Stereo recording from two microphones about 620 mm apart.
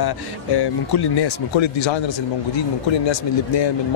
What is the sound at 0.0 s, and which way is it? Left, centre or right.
Speech, left.